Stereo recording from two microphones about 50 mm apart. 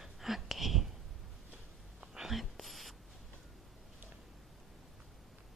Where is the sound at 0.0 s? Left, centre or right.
Centre.